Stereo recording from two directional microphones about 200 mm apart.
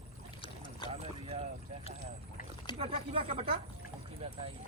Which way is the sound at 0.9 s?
30° right (ahead or behind).